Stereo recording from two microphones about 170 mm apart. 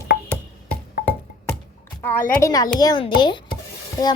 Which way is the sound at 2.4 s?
20° left (ahead or behind).